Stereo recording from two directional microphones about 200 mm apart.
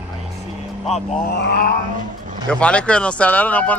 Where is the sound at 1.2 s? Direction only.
55° left (ahead or behind).